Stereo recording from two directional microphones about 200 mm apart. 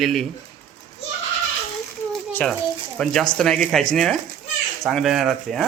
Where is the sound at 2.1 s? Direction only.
5° left (ahead or behind).